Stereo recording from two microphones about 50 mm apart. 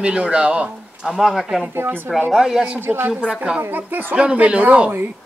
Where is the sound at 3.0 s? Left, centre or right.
Right.